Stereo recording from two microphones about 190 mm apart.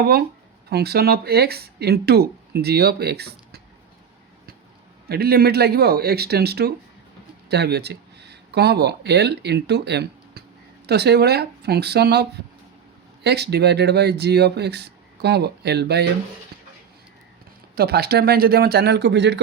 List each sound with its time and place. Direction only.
0.0 s speech: 55° right (ahead or behind)
5.0 s speech: 55° right (ahead or behind)
17.7 s speech: 55° right (ahead or behind)